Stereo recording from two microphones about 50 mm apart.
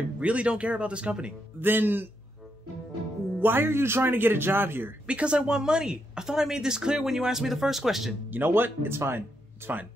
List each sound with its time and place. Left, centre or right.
0.2 s speech: right
1.6 s speech: right
3.3 s speech: right
5.0 s speech: right; by 8.1 s centre
8.3 s speech: right